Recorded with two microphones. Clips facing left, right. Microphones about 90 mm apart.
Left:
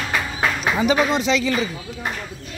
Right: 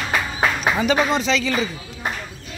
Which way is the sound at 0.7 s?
5° left (ahead or behind).